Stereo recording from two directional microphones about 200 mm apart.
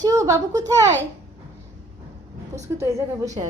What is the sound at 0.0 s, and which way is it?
Speech, 15° right (ahead or behind).